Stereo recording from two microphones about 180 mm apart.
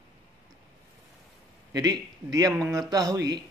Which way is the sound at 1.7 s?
20° right (ahead or behind).